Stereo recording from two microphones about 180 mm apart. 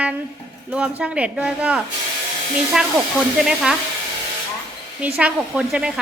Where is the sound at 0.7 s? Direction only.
5° right (ahead or behind).